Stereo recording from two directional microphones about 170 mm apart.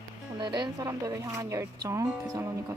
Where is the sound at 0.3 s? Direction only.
25° right (ahead or behind).